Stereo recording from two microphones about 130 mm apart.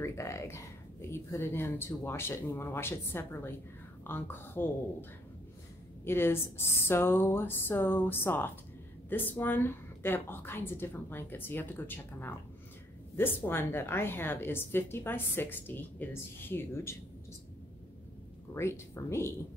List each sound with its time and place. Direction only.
0.0 s a woman's voice: 20° left (ahead or behind)
6.0 s a woman's voice: 15° left (ahead or behind)
18.5 s speech: 20° left (ahead or behind)